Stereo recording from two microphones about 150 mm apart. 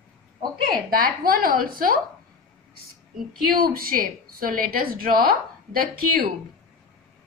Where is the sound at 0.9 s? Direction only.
75° right (ahead or behind).